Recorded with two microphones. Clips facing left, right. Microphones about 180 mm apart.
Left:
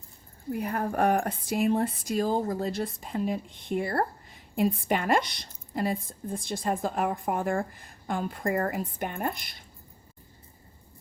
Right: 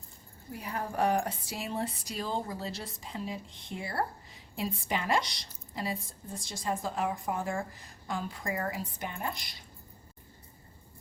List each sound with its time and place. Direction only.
0.5 s a woman's voice: 55° left (ahead or behind)